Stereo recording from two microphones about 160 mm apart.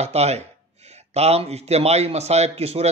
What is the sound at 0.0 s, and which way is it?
A man's voice, 40° right (ahead or behind).